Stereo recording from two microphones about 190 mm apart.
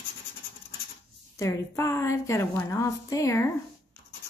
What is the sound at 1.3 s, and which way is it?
A woman's voice, 15° left (ahead or behind).